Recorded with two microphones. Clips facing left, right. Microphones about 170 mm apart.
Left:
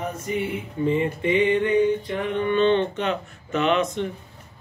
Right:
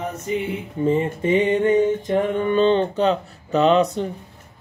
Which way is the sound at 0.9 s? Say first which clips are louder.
Right 3 dB; 40° right (ahead or behind).